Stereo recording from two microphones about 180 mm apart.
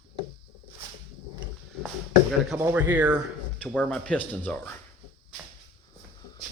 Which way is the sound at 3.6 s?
5° left (ahead or behind).